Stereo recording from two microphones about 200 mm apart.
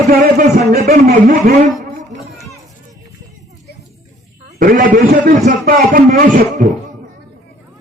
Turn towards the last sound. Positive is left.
turn(degrees=-40)  # may be behind; listen again after turning